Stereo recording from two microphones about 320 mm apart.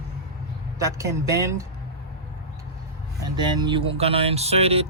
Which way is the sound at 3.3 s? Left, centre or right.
Centre.